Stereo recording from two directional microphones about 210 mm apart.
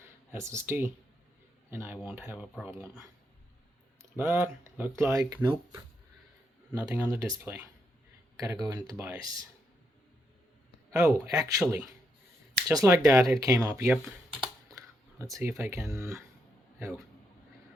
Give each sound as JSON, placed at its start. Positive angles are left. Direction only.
{"t": 0.3, "sound": "speech", "side_deg": -10}
{"t": 4.2, "sound": "speech", "side_deg": -10}
{"t": 10.9, "sound": "speech", "side_deg": -15}